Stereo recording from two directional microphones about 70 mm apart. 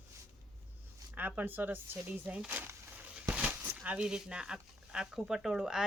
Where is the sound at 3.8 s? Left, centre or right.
Centre.